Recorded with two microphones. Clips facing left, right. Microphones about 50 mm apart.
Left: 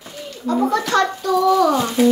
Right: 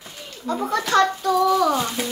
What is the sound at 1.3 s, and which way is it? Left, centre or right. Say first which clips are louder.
Speech: left 4 dB; centre.